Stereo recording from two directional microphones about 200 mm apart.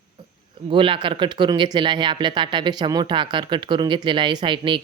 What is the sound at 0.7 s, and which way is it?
Speech, 25° right (ahead or behind).